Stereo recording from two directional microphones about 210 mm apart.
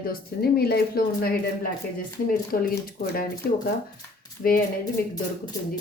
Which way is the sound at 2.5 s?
45° left (ahead or behind).